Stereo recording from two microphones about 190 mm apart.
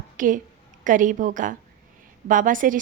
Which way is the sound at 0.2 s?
45° right (ahead or behind).